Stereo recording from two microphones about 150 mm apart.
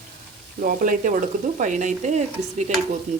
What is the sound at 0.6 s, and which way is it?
Stir, 65° right (ahead or behind).